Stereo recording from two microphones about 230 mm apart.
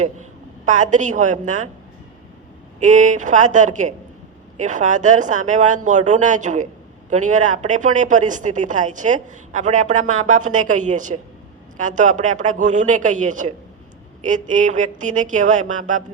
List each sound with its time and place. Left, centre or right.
0.0 s a woman's voice: right
2.8 s speech: right